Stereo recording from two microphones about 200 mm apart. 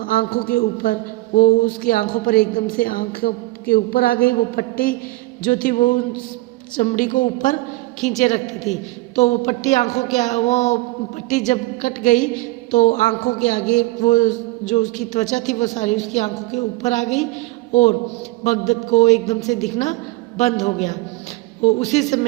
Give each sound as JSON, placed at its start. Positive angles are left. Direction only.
{"t": 0.0, "sound": "a woman's voice", "side_deg": 45}
{"t": 20.4, "sound": "a woman's voice", "side_deg": 35}